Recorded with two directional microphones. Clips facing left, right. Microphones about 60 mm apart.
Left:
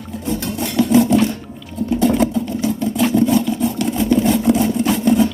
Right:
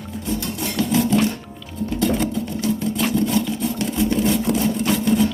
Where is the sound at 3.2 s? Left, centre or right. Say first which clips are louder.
Left 5 dB; centre.